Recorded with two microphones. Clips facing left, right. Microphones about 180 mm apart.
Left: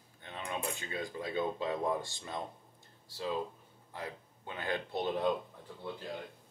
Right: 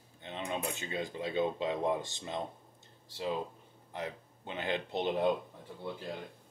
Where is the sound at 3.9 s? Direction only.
20° right (ahead or behind).